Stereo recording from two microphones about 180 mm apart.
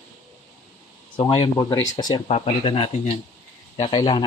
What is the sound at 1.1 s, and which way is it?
Speech, 30° left (ahead or behind).